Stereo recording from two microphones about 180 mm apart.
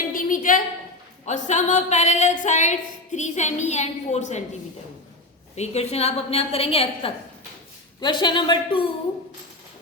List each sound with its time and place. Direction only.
0.1 s a sound: 50° left (ahead or behind)
1.2 s a woman's voice: 40° left (ahead or behind)
5.5 s a woman's voice: 35° left (ahead or behind)